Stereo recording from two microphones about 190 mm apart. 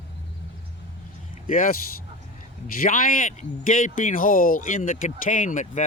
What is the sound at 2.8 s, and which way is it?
Speech, 45° left (ahead or behind).